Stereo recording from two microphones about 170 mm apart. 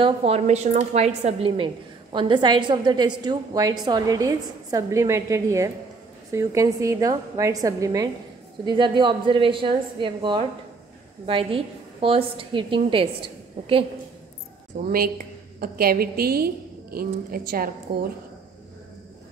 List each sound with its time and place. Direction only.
0.0 s a woman's voice: 35° right (ahead or behind)
14.9 s a woman's voice: 60° right (ahead or behind)